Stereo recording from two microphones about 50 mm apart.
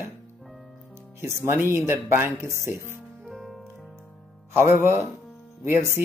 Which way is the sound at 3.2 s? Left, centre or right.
Centre.